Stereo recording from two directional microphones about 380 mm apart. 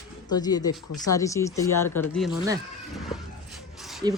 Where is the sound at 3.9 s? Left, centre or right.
Centre.